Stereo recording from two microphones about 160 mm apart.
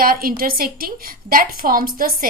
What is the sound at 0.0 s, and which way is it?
A woman's voice, 65° right (ahead or behind).